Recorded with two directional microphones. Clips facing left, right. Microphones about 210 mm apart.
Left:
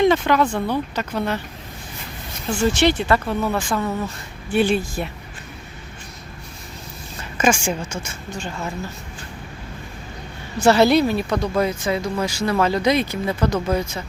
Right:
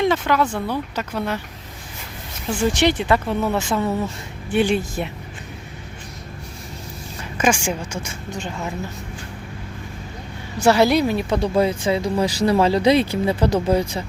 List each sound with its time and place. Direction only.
0.0 s speech: 5° right (ahead or behind)
2.5 s speech: 15° right (ahead or behind)
7.3 s a woman's voice: 10° right (ahead or behind)
10.6 s speech: 10° right (ahead or behind); by 14.0 s 35° right (ahead or behind)